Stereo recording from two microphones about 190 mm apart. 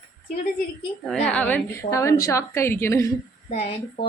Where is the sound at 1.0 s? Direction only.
5° left (ahead or behind).